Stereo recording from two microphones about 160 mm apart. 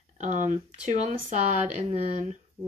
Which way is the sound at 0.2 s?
50° right (ahead or behind).